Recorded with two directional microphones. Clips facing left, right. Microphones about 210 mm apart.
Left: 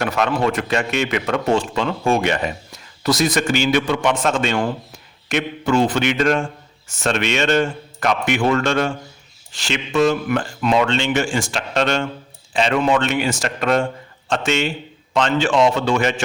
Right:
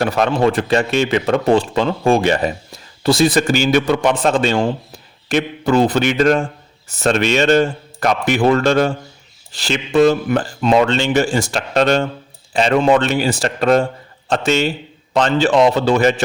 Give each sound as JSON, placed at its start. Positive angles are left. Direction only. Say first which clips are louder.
{"t": 0.0, "sound": "a man's voice", "louder": "right 4 dB", "side_deg": -35}